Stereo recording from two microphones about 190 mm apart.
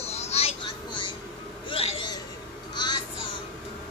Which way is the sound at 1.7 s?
30° left (ahead or behind).